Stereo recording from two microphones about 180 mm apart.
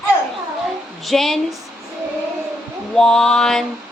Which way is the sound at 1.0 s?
Centre (ahead or behind).